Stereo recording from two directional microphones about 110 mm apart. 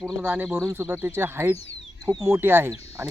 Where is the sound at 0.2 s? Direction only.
15° right (ahead or behind).